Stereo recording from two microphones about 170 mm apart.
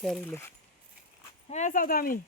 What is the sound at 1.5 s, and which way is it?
Speech, 45° left (ahead or behind).